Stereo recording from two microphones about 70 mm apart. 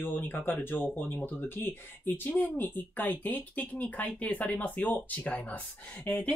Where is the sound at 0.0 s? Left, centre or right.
Left.